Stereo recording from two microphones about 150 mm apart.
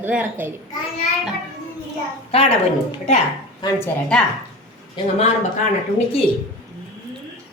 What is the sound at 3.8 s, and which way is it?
Speech, 5° left (ahead or behind).